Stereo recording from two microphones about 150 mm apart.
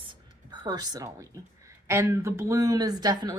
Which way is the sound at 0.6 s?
25° right (ahead or behind).